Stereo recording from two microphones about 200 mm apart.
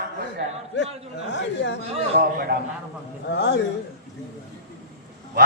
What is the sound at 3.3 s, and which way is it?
Speech, 60° left (ahead or behind).